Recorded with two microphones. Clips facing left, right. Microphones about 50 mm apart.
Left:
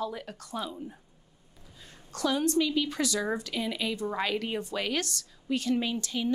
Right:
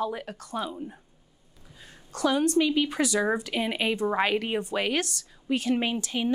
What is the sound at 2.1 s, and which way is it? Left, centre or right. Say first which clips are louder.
Speech: right 3 dB; centre.